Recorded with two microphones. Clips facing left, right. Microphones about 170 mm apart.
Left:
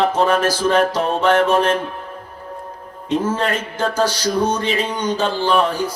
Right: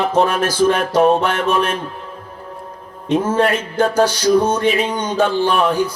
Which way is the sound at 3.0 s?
55° right (ahead or behind).